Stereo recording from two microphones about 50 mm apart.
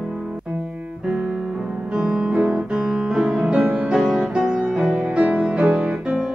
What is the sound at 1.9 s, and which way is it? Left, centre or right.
Music, centre.